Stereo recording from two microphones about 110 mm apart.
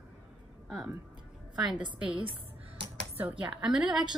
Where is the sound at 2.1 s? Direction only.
55° right (ahead or behind).